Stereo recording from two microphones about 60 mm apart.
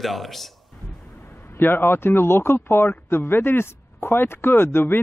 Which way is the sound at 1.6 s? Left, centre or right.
Left.